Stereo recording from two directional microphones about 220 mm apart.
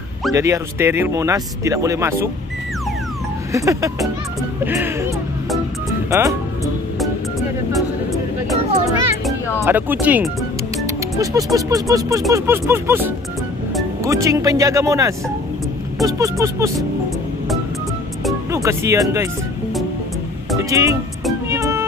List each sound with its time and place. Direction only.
0.3 s speech: 15° right (ahead or behind)
3.5 s speech: 15° right (ahead or behind)
4.6 s music: 10° right (ahead or behind)
6.0 s speech: 15° right (ahead or behind)
6.6 s music: centre (ahead or behind)
9.7 s speech: 10° right (ahead or behind)
18.5 s speech: 15° right (ahead or behind)
20.5 s speech: 15° right (ahead or behind)
21.5 s music: 15° right (ahead or behind)